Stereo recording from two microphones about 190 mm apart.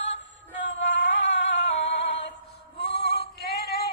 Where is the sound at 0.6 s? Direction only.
75° left (ahead or behind).